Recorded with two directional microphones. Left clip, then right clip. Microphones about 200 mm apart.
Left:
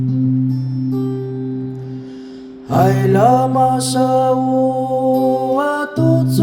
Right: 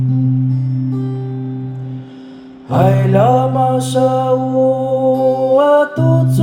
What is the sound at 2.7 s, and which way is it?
Mantra, 30° left (ahead or behind).